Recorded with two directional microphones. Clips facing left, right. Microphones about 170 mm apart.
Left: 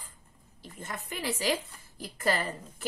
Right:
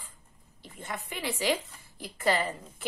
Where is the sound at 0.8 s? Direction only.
40° left (ahead or behind).